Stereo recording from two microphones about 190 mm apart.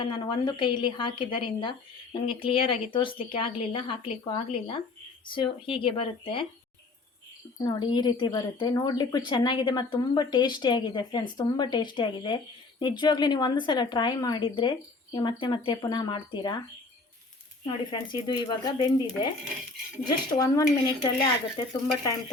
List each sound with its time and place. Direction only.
0.0 s a woman's voice: 25° left (ahead or behind)
7.7 s a woman's voice: 20° left (ahead or behind)
17.7 s a woman's voice: 25° left (ahead or behind)